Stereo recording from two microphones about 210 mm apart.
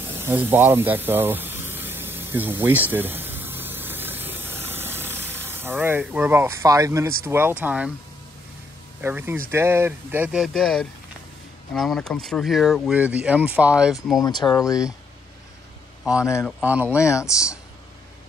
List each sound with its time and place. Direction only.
0.2 s a sound: 10° right (ahead or behind)
7.2 s speech: 10° right (ahead or behind)
9.0 s speech: 10° right (ahead or behind)
14.2 s speech: 20° left (ahead or behind)
16.0 s a man's voice: 5° right (ahead or behind)